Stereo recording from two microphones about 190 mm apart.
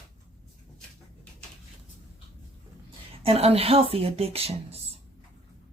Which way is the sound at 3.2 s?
30° right (ahead or behind).